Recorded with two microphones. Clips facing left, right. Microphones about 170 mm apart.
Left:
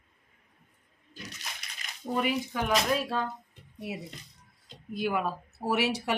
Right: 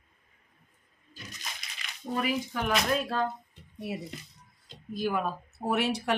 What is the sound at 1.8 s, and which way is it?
Dishes, 40° left (ahead or behind).